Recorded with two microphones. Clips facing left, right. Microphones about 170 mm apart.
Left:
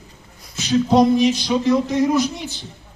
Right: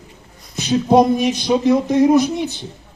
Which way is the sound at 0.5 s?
55° right (ahead or behind).